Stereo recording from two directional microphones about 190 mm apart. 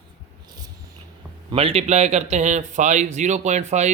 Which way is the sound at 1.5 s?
30° right (ahead or behind).